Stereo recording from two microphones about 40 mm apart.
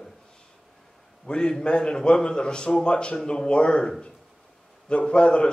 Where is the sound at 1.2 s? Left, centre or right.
Left.